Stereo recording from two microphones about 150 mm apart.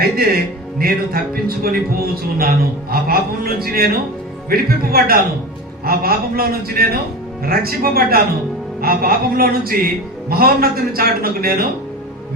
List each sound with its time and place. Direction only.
0.2 s speech: 85° right